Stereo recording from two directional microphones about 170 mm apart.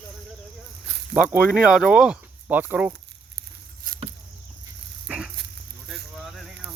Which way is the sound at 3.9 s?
55° right (ahead or behind).